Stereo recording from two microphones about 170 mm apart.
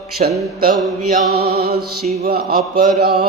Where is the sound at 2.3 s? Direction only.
65° right (ahead or behind).